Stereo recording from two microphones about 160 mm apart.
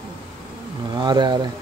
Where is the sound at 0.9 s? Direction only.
25° right (ahead or behind).